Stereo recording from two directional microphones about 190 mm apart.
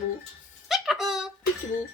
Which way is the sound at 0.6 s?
Centre (ahead or behind).